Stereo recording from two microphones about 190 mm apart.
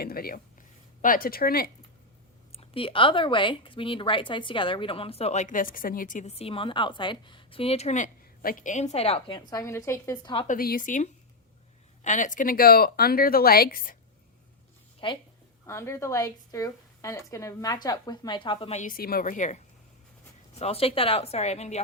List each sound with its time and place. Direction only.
0.0 s a sound: 50° left (ahead or behind)
1.0 s speech: 50° left (ahead or behind)
2.5 s speech: 30° left (ahead or behind); by 10.3 s 15° left (ahead or behind)
10.3 s speech: 40° left (ahead or behind)
15.0 s speech: 25° left (ahead or behind)
15.6 s a woman's voice: 15° left (ahead or behind); by 21.8 s 35° left (ahead or behind)